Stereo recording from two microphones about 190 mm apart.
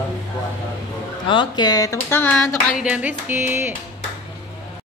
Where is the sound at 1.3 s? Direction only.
25° left (ahead or behind).